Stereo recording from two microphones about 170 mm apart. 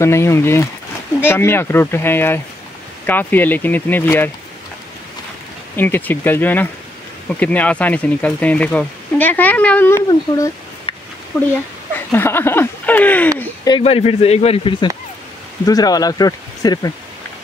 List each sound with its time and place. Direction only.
0.0 s speech: 15° left (ahead or behind)
5.8 s speech: 10° left (ahead or behind)
10.9 s a sound: 30° left (ahead or behind)
12.1 s speech: 15° left (ahead or behind)
13.7 s speech: 30° left (ahead or behind)